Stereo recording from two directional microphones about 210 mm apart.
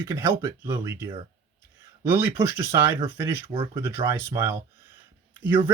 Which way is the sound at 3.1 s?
10° right (ahead or behind).